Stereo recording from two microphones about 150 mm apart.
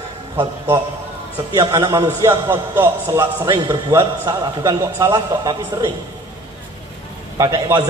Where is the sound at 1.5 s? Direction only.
25° right (ahead or behind).